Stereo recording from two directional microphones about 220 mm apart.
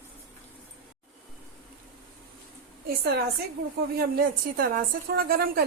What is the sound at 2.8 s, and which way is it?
A woman's voice, 45° right (ahead or behind).